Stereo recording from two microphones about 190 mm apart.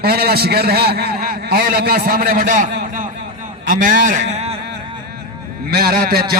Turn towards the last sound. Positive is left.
turn(degrees=-55)  # may be behind; listen again after turning